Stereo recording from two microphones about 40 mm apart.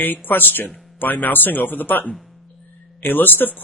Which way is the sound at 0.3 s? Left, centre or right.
Left.